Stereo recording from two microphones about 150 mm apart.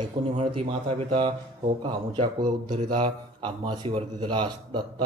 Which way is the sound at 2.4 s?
65° right (ahead or behind).